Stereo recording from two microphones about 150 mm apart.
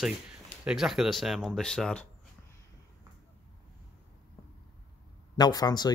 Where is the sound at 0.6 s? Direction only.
5° right (ahead or behind).